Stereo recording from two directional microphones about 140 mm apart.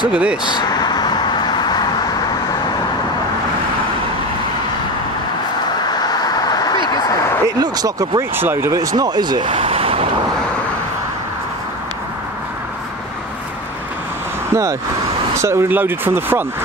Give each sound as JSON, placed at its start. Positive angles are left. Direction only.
{"t": 0.1, "sound": "speech", "side_deg": -10}
{"t": 0.6, "sound": "vehicle", "side_deg": 30}
{"t": 5.9, "sound": "vehicle", "side_deg": 30}
{"t": 7.4, "sound": "speech", "side_deg": -25}
{"t": 14.5, "sound": "speech", "side_deg": -25}